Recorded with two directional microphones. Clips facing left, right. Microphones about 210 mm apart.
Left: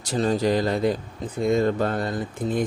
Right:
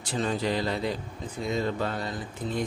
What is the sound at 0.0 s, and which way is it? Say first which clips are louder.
Speech: left 6 dB; 40° left (ahead or behind).